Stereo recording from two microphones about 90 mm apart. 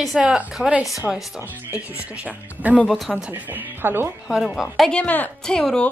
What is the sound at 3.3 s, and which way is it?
Speech, 20° right (ahead or behind).